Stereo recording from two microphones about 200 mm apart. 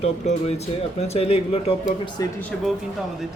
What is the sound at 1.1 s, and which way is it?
Speech, 30° left (ahead or behind).